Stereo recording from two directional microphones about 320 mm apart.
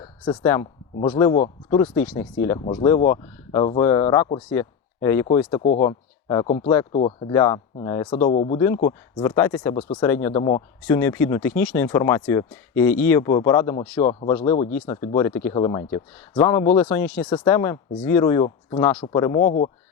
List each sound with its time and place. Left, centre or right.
0.0 s a man's voice: centre